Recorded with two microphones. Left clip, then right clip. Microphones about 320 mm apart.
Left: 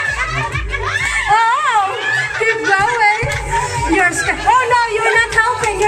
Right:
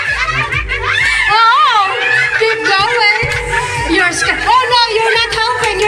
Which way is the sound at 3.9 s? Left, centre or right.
Left.